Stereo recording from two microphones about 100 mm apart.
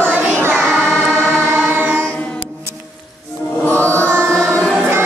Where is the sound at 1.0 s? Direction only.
20° right (ahead or behind).